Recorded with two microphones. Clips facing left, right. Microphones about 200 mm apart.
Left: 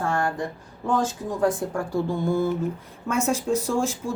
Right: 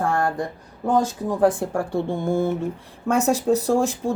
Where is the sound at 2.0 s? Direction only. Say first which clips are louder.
Right 1 dB; 50° right (ahead or behind).